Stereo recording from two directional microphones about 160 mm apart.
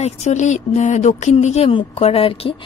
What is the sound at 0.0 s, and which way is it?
Speech, 45° left (ahead or behind).